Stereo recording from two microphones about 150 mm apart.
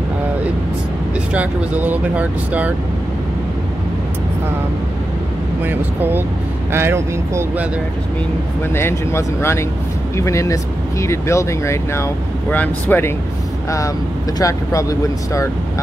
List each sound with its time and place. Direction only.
1.3 s speech: 10° right (ahead or behind)
5.6 s speech: 15° right (ahead or behind)
8.7 s speech: 15° left (ahead or behind)
14.4 s speech: 20° left (ahead or behind)